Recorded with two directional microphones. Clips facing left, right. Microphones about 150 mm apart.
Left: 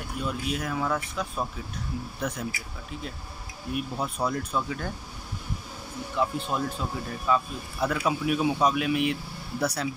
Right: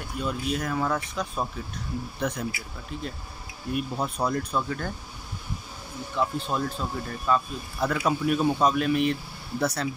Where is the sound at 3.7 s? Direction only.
Centre (ahead or behind).